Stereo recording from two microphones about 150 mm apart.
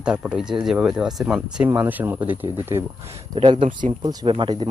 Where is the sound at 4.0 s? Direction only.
25° right (ahead or behind).